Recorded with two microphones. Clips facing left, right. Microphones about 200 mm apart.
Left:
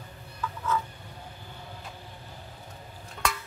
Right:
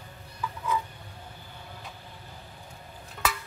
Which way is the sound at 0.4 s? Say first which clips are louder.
Even; 10° right (ahead or behind).